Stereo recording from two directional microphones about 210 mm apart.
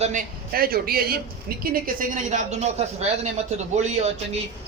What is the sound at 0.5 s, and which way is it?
Speech, 45° right (ahead or behind).